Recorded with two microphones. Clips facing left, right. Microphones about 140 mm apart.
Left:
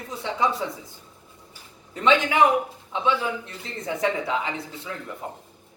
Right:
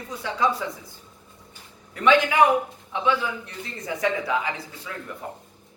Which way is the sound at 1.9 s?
20° left (ahead or behind).